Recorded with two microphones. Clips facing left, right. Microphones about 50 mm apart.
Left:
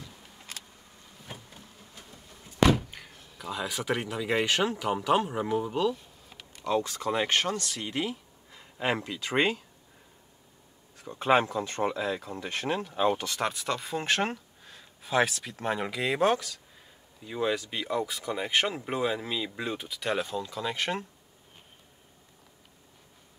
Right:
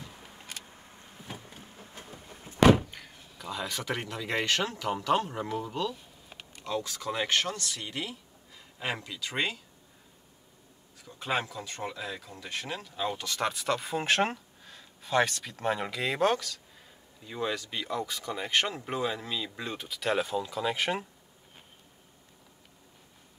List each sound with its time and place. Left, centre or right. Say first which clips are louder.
1.2 s a sound: right 1 dB; right
1.8 s vehicle: right 4 dB; right
2.9 s speech: even; centre
6.7 s a man's voice: left 5 dB; left
11.0 s a sound: left 7 dB; left
11.2 s speech: left 8 dB; left
13.4 s speech: right 1 dB; centre